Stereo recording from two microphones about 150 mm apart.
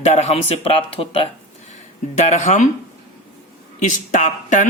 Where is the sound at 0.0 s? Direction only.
45° left (ahead or behind).